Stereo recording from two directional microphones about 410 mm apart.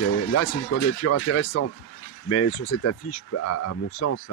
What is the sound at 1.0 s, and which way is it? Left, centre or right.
Speech, left.